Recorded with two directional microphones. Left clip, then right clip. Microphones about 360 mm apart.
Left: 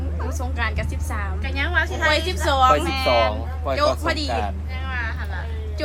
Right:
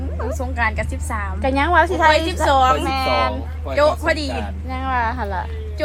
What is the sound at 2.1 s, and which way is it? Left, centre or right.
Speech, right.